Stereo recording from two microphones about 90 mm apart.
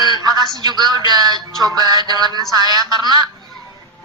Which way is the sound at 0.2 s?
50° right (ahead or behind).